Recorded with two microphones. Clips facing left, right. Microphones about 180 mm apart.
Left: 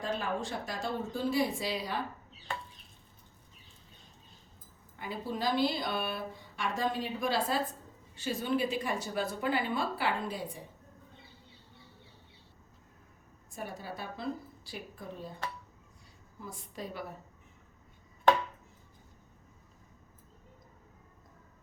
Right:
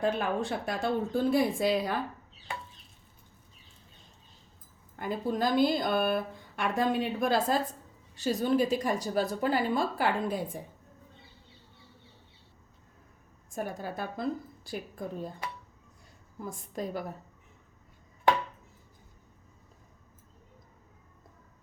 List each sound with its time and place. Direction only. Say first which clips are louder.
0.0 s speech: right 5 dB; 60° right (ahead or behind)
4.9 s speech: right 6 dB; 50° right (ahead or behind)
13.5 s speech: right 5 dB; 50° right (ahead or behind)
16.4 s speech: right 6 dB; 45° right (ahead or behind)